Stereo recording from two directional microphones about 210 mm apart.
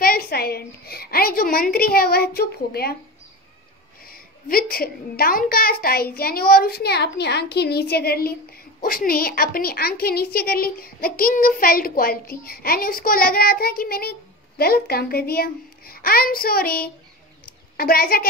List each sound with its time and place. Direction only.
0.0 s a woman's voice: 45° left (ahead or behind)
4.0 s a woman's voice: 45° left (ahead or behind)